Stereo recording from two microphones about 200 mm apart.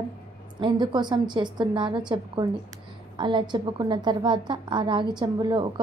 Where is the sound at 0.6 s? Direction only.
20° right (ahead or behind).